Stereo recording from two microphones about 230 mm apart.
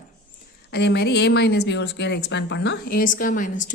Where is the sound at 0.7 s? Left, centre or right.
Left.